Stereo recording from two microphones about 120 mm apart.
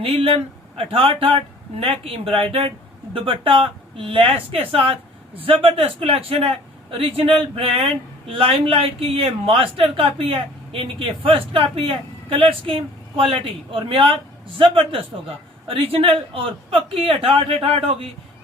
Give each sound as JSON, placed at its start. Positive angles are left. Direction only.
{"t": 0.0, "sound": "a man's voice", "side_deg": -55}